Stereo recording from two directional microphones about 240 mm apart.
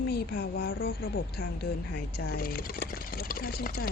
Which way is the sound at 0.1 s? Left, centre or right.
Left.